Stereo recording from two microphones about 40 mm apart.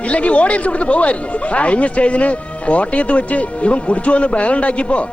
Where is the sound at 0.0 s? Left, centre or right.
Left.